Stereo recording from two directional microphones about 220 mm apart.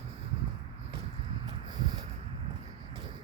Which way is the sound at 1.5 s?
20° right (ahead or behind).